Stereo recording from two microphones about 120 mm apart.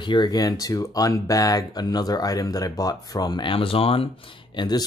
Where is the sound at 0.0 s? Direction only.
40° left (ahead or behind).